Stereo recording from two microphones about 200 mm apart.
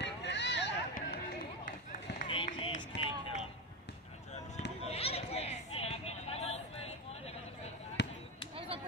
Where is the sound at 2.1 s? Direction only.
30° left (ahead or behind).